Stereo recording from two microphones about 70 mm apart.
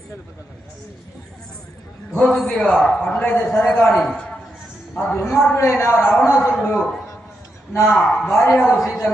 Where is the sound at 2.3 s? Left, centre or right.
Centre.